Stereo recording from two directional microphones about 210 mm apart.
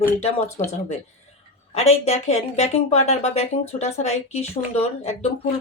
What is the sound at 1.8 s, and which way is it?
Speech, 30° left (ahead or behind).